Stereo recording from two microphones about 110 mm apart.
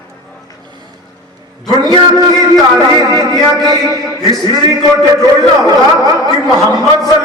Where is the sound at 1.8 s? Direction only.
35° right (ahead or behind).